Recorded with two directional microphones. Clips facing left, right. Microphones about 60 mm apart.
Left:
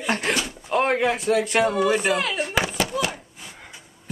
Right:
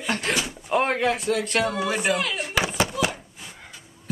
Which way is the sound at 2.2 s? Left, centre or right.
Left.